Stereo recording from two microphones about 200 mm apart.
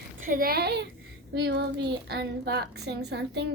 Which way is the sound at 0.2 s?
45° right (ahead or behind).